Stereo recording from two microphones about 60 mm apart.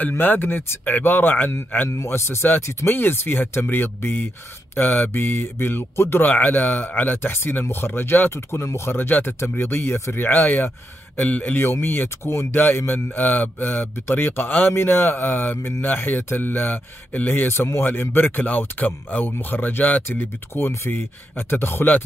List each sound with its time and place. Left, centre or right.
0.1 s speech: left
1.9 s speech: left
2.9 s speech: left